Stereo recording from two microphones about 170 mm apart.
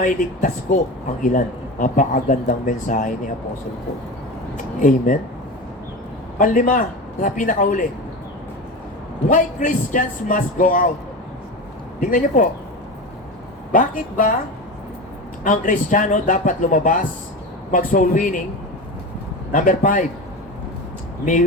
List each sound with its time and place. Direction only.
0.0 s speech: 50° left (ahead or behind)
4.5 s speech: 50° left (ahead or behind)
6.4 s speech: 50° left (ahead or behind)
9.3 s speech: 50° left (ahead or behind)
11.9 s speech: 50° left (ahead or behind)
13.7 s speech: 50° left (ahead or behind)
15.4 s speech: 50° left (ahead or behind)
19.5 s speech: 50° left (ahead or behind)